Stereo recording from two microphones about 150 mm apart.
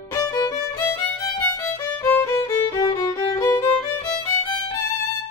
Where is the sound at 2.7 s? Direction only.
30° left (ahead or behind).